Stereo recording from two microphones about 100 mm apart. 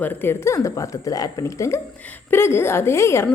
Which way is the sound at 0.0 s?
20° left (ahead or behind).